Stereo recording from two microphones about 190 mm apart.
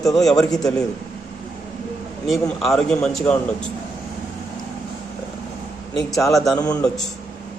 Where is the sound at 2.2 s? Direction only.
Centre (ahead or behind).